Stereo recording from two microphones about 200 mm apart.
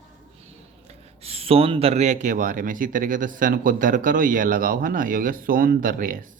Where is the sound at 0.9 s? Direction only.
30° right (ahead or behind).